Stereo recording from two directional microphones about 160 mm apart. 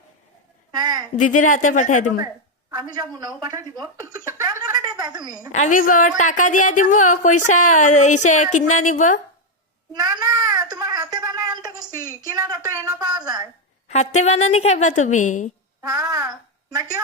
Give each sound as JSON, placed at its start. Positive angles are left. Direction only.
{"t": 0.7, "sound": "a woman's voice", "side_deg": -25}
{"t": 1.2, "sound": "speech", "side_deg": 55}
{"t": 2.2, "sound": "a woman's voice", "side_deg": -20}
{"t": 4.3, "sound": "a sound", "side_deg": -20}
{"t": 5.5, "sound": "speech", "side_deg": 50}
{"t": 9.9, "sound": "a sound", "side_deg": -25}
{"t": 13.1, "sound": "a woman's voice", "side_deg": -25}
{"t": 13.8, "sound": "speech", "side_deg": 45}
{"t": 15.8, "sound": "a woman's voice", "side_deg": -20}